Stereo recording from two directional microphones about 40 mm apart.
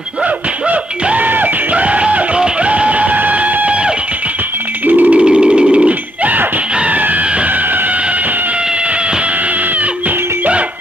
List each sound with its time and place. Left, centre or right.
0.7 s music: right
4.8 s music: right
5.1 s music: right
5.9 s a sound: right